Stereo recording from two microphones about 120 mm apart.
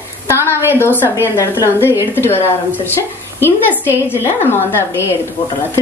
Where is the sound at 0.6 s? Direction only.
20° left (ahead or behind).